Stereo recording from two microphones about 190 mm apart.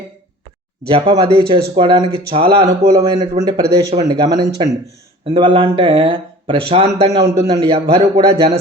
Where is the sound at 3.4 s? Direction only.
35° right (ahead or behind).